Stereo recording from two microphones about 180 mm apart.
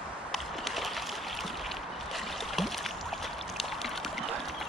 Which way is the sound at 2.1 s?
Centre (ahead or behind).